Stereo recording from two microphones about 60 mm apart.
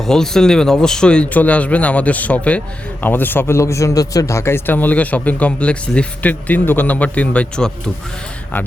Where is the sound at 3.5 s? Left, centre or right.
Left.